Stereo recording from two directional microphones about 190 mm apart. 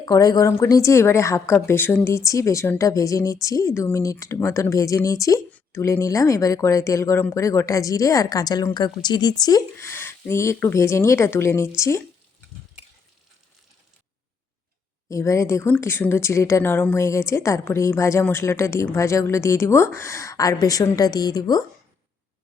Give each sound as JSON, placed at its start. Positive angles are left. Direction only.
{"t": 0.0, "sound": "speech", "side_deg": 20}
{"t": 15.1, "sound": "speech", "side_deg": 15}